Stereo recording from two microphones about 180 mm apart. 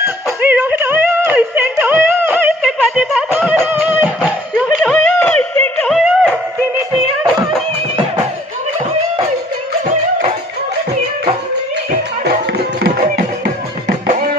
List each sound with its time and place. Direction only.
0.4 s music: 10° right (ahead or behind)
2.6 s a sound: centre (ahead or behind)
3.3 s music: 10° right (ahead or behind)
13.4 s music: 45° right (ahead or behind)